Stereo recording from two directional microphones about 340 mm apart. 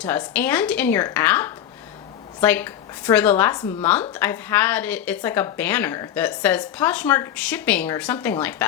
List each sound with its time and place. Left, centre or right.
0.0 s a woman's voice: centre